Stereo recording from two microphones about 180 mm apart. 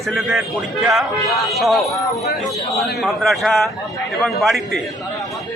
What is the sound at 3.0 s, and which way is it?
A man's voice, centre (ahead or behind).